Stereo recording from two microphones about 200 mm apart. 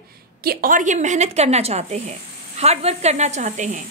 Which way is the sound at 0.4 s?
45° right (ahead or behind).